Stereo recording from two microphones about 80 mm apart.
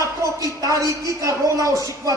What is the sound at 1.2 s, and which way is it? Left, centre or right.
Speech, right.